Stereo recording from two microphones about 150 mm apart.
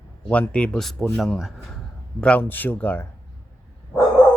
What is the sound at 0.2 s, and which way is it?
Speech, 10° left (ahead or behind).